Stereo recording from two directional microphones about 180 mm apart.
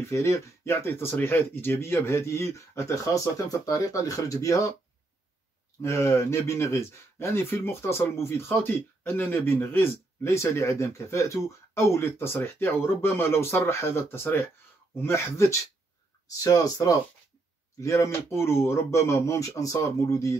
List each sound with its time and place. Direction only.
0.1 s speech: 15° left (ahead or behind)
5.8 s speech: 15° left (ahead or behind)